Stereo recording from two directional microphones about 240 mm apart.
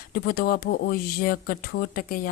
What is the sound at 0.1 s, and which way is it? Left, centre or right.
Speech, left.